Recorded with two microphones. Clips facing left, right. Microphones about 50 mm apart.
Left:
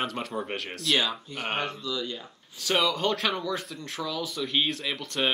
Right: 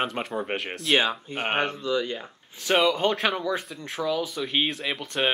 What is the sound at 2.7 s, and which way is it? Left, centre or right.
Speech, right.